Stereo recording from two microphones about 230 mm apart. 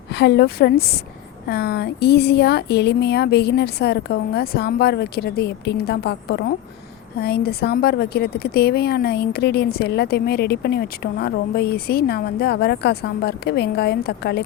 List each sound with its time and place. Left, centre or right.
0.1 s a woman's voice: left